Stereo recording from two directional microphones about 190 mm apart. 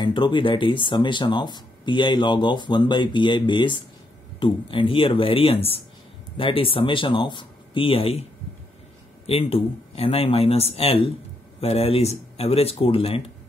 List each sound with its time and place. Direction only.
0.0 s speech: 25° left (ahead or behind)